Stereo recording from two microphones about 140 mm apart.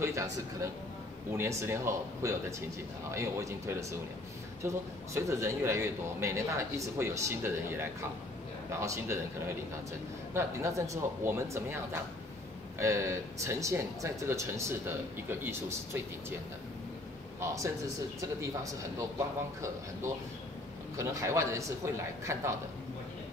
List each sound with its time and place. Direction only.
0.0 s speech: 20° right (ahead or behind)
10.3 s speech: 20° right (ahead or behind)
18.2 s speech: 20° right (ahead or behind)
20.9 s speech: 20° right (ahead or behind)